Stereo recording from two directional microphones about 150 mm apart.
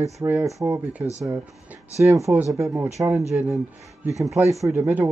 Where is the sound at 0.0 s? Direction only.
20° right (ahead or behind).